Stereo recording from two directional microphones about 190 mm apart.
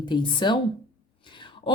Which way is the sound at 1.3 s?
25° left (ahead or behind).